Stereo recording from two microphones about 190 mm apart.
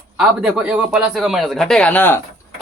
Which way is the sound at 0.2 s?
5° right (ahead or behind).